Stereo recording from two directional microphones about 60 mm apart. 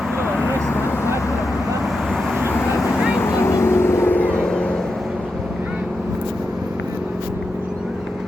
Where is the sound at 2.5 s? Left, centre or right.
Left.